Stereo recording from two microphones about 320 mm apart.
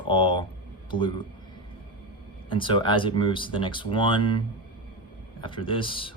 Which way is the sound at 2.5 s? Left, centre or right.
Centre.